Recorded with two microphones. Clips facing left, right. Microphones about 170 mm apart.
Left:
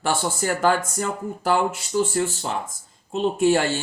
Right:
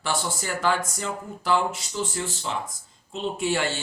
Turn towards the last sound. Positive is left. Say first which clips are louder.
# left 7 dB
turn(degrees=45)  # may be behind; listen again after turning